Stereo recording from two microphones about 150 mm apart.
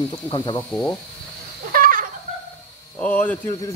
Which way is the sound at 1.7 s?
65° right (ahead or behind).